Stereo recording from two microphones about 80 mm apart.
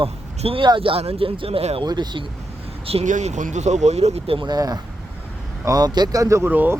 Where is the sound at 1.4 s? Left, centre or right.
Right.